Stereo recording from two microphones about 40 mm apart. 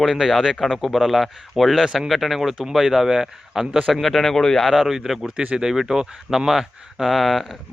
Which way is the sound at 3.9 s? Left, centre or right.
Centre.